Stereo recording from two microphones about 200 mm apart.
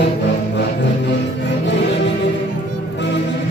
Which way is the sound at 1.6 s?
60° left (ahead or behind).